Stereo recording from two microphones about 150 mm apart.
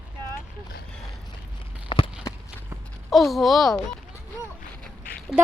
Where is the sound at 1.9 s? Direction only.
30° left (ahead or behind).